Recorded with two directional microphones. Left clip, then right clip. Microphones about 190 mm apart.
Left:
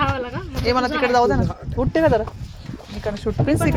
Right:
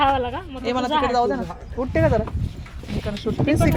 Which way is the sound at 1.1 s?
15° left (ahead or behind).